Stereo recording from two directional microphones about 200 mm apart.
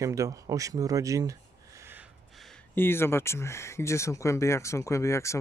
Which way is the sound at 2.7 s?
10° left (ahead or behind).